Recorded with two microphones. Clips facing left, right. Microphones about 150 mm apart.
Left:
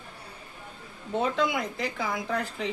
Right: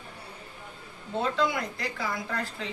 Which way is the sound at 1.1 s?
20° left (ahead or behind).